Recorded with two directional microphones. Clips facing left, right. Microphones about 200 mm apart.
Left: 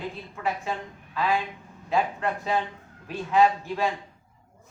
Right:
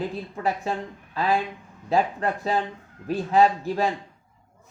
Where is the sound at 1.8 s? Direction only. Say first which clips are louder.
Right 3 dB; 35° right (ahead or behind).